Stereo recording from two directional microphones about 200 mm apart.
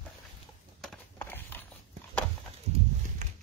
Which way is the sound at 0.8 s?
5° left (ahead or behind).